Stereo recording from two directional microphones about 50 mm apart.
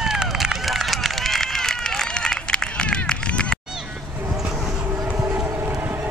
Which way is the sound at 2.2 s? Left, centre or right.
Centre.